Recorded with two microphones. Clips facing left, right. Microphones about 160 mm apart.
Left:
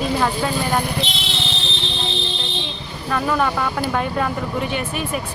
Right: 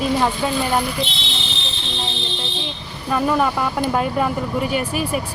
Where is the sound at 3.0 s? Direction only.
10° right (ahead or behind).